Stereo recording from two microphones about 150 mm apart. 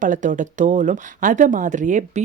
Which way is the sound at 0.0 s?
60° right (ahead or behind).